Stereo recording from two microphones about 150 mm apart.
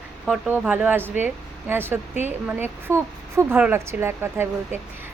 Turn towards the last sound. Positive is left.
turn(degrees=-15)  # may be behind; listen again after turning